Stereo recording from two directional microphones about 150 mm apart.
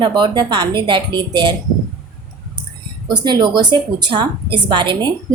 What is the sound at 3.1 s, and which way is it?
A woman's voice, 30° right (ahead or behind).